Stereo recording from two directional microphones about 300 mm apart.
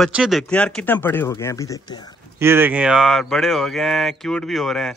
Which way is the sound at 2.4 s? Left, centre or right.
Centre.